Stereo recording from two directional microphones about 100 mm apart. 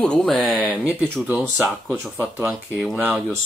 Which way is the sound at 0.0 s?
10° left (ahead or behind).